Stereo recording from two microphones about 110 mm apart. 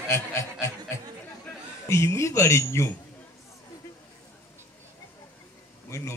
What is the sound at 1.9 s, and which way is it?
A man's voice, 25° left (ahead or behind).